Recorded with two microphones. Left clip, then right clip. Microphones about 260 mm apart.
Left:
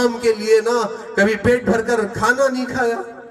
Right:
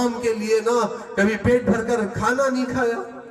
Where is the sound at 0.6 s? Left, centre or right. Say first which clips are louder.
Left 2 dB; left.